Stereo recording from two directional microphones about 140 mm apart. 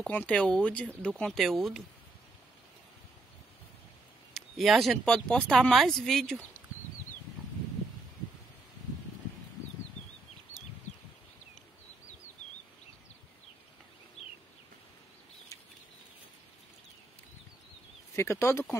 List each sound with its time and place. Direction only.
0.0 s speech: 10° left (ahead or behind)
4.3 s speech: centre (ahead or behind)
14.2 s a sound: 50° left (ahead or behind)
18.1 s speech: 20° left (ahead or behind)